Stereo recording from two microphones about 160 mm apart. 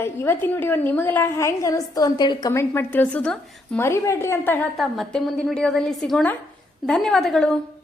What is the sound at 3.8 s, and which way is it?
Speech, 15° left (ahead or behind).